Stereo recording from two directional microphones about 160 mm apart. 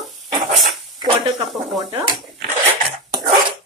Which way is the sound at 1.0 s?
30° right (ahead or behind).